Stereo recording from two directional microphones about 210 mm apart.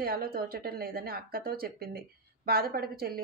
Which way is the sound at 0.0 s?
45° right (ahead or behind).